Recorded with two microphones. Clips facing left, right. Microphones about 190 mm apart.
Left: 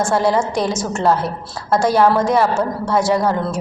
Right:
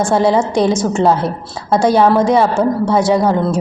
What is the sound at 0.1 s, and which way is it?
Speech, 20° right (ahead or behind).